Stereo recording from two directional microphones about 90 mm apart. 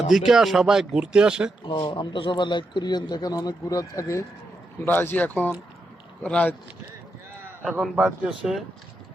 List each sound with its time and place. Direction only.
0.1 s speech: 5° right (ahead or behind)
1.6 s speech: 60° left (ahead or behind); by 4.3 s 35° left (ahead or behind)
4.9 s speech: 25° left (ahead or behind)
7.6 s a man's voice: 5° right (ahead or behind)